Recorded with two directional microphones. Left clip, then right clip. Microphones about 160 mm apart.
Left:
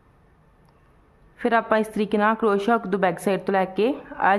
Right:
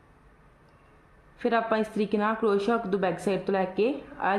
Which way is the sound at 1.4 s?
15° left (ahead or behind).